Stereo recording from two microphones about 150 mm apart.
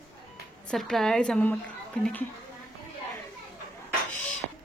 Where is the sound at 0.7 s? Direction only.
Centre (ahead or behind).